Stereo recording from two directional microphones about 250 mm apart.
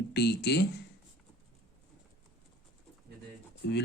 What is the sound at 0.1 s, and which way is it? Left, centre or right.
Speech, left.